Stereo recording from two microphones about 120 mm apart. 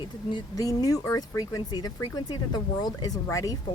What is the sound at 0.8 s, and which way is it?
Speech, 30° left (ahead or behind).